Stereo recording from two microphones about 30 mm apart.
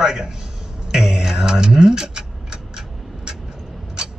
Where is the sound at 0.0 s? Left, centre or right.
Right.